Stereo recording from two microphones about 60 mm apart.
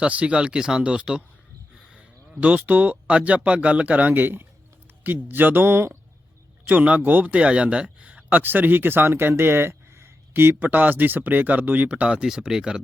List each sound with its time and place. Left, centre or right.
0.0 s speech: right
2.4 s speech: right
6.7 s speech: right
10.5 s speech: right
12.2 s speech: centre